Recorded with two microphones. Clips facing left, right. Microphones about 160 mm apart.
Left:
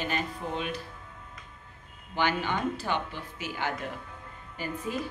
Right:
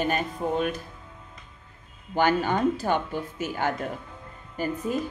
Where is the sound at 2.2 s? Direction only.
45° right (ahead or behind).